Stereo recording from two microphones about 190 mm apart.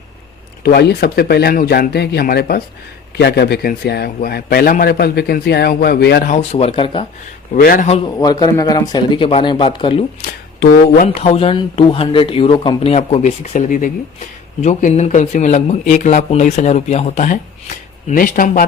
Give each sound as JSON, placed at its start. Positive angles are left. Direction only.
{"t": 0.6, "sound": "a man's voice", "side_deg": 55}
{"t": 6.3, "sound": "speech", "side_deg": 35}
{"t": 7.5, "sound": "speech", "side_deg": 45}
{"t": 7.9, "sound": "speech", "side_deg": 35}
{"t": 8.2, "sound": "speech", "side_deg": 20}
{"t": 10.6, "sound": "speech", "side_deg": 55}
{"t": 11.1, "sound": "speech", "side_deg": 30}